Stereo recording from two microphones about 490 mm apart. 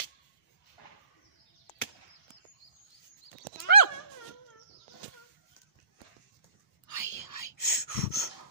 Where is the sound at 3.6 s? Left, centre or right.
Left.